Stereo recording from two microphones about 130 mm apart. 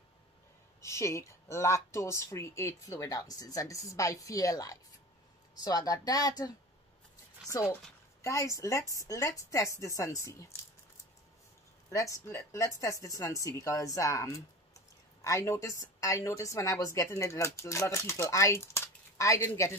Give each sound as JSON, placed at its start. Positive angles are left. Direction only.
{"t": 0.7, "sound": "a woman's voice", "side_deg": 20}
{"t": 8.2, "sound": "a woman's voice", "side_deg": 25}
{"t": 11.9, "sound": "a woman's voice", "side_deg": 25}